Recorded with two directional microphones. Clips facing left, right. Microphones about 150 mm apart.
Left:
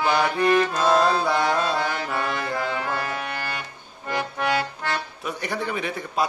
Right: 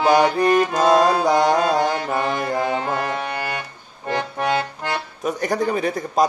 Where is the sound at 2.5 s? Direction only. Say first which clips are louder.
Right 5 dB; 20° right (ahead or behind).